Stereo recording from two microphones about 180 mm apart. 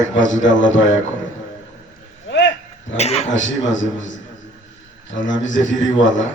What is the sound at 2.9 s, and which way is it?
Speech, 35° left (ahead or behind).